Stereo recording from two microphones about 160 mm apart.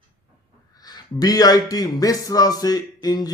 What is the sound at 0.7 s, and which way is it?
A man's voice, 25° left (ahead or behind).